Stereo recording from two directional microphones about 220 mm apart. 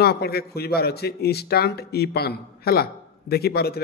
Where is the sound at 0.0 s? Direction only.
45° left (ahead or behind).